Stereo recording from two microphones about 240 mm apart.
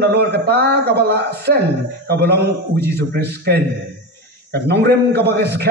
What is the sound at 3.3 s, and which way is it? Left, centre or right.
A man's voice, right.